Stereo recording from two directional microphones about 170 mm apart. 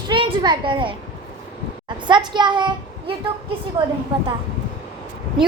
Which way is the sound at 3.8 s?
30° right (ahead or behind).